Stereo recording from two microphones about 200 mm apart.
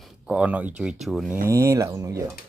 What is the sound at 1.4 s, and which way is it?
Speech, 15° right (ahead or behind).